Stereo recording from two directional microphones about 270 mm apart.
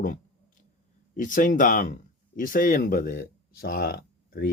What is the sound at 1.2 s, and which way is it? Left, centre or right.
Speech, left.